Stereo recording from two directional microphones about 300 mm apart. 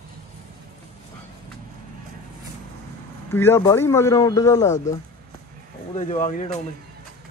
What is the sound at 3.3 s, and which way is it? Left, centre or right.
Speech, centre.